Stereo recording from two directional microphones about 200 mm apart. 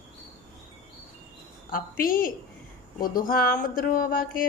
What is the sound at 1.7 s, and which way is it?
A woman's voice, 45° left (ahead or behind).